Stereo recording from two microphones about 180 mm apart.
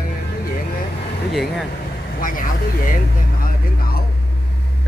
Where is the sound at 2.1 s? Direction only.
50° left (ahead or behind).